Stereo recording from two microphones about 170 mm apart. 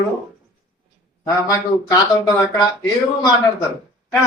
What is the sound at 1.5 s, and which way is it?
Speech, 20° left (ahead or behind).